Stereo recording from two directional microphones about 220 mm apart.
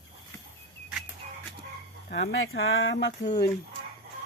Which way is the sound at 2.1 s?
60° left (ahead or behind).